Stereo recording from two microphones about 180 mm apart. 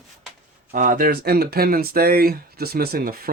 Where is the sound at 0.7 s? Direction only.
45° right (ahead or behind).